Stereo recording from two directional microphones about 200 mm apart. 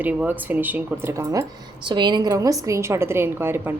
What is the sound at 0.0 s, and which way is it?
Speech, 10° right (ahead or behind).